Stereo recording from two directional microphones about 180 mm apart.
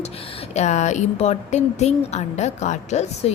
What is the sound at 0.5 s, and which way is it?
Speech, 40° left (ahead or behind).